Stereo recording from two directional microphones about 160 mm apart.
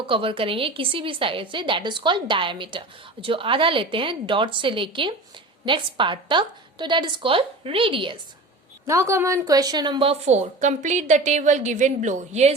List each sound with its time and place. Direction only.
0.0 s a woman's voice: 35° right (ahead or behind)
8.9 s a woman's voice: 15° right (ahead or behind); by 12.5 s 45° right (ahead or behind)